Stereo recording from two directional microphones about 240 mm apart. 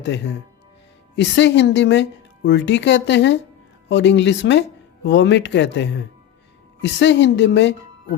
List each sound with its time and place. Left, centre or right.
1.1 s a woman's voice: left